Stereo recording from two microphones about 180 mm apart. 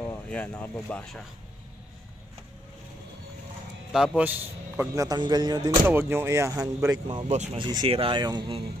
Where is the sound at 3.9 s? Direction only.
5° right (ahead or behind); by 5.9 s 20° right (ahead or behind).